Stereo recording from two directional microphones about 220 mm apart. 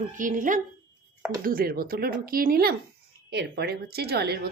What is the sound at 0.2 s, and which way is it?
Speech, 35° right (ahead or behind).